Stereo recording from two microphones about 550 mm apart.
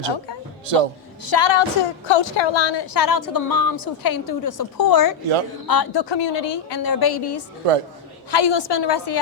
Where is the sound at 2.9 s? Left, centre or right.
Left.